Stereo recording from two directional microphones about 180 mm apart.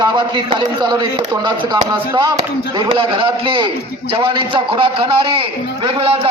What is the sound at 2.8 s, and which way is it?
A man's voice, 25° right (ahead or behind).